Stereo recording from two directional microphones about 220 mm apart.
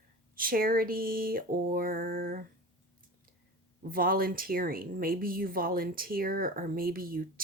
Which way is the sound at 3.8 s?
40° right (ahead or behind).